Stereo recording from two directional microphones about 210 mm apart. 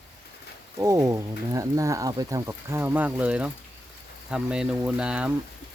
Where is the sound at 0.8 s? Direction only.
15° right (ahead or behind).